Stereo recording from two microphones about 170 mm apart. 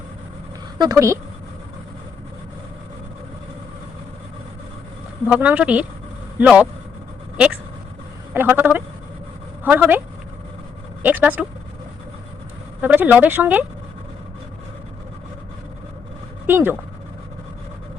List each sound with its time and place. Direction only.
0.8 s speech: 20° right (ahead or behind)
5.3 s speech: 5° right (ahead or behind)
8.3 s speech: 10° right (ahead or behind)
11.0 s speech: 10° right (ahead or behind)
12.8 s speech: 10° right (ahead or behind)
16.5 s speech: 10° right (ahead or behind)